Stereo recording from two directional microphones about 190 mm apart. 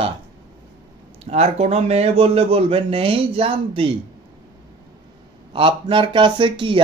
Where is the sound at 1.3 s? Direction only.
35° right (ahead or behind).